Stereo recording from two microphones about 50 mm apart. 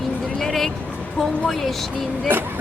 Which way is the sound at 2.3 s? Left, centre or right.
Right.